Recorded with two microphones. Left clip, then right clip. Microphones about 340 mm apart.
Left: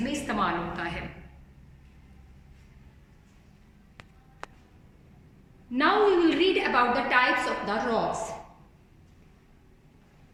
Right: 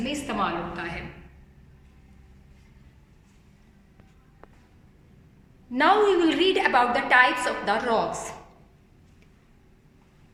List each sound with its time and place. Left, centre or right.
0.1 s a woman's voice: centre
4.4 s a sound: left
5.7 s a woman's voice: centre